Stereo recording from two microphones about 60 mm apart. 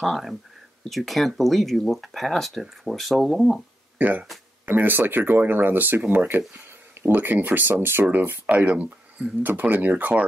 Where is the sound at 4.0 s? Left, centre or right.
Right.